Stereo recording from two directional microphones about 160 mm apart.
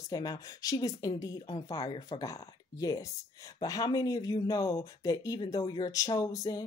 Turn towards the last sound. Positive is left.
turn(degrees=20)  # may be behind; listen again after turning